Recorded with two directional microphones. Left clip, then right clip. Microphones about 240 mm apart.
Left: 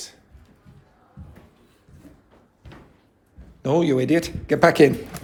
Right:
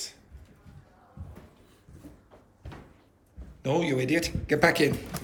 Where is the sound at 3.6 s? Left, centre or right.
Centre.